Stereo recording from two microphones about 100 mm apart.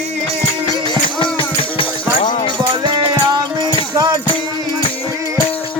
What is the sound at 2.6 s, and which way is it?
Music, 55° right (ahead or behind).